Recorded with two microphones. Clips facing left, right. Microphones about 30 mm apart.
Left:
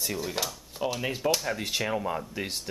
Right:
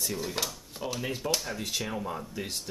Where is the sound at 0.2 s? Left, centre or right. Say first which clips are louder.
Left 1 dB; centre.